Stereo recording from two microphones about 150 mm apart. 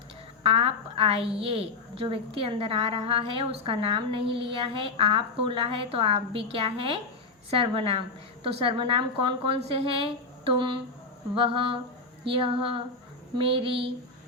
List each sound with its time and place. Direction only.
0.4 s a woman's voice: 40° right (ahead or behind)